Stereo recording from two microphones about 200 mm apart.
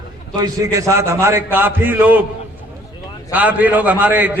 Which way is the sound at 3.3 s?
10° right (ahead or behind).